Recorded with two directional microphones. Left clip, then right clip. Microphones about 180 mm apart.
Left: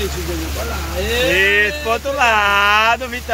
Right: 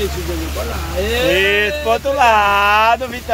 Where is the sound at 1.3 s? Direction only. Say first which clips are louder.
Left 1 dB; 15° right (ahead or behind).